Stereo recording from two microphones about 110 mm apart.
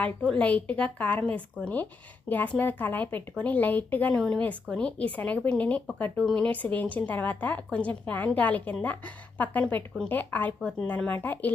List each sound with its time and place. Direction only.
0.3 s a woman's voice: 10° left (ahead or behind)